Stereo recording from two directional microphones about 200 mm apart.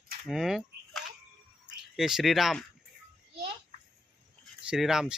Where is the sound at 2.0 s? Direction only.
Centre (ahead or behind).